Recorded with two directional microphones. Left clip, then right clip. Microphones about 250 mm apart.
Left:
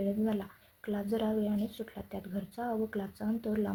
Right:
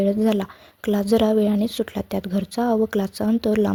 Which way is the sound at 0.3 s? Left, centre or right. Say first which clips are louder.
Right 14 dB; right.